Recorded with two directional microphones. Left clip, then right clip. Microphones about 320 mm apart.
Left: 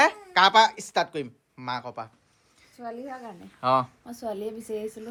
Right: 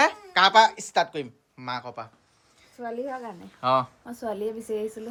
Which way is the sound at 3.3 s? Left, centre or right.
Centre.